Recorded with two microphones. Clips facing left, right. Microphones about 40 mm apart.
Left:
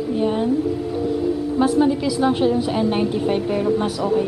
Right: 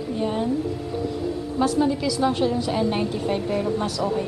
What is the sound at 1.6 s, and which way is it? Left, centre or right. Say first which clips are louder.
A woman's voice: left 3 dB; centre.